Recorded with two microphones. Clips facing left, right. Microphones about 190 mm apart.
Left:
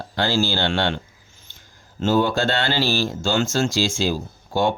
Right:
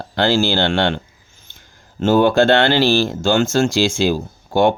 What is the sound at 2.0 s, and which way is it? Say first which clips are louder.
Speech: right 7 dB; 55° right (ahead or behind).